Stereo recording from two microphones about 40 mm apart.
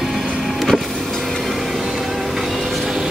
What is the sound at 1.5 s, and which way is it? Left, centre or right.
Vehicle, centre.